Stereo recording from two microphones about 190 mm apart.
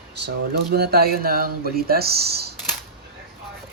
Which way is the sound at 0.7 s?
55° right (ahead or behind).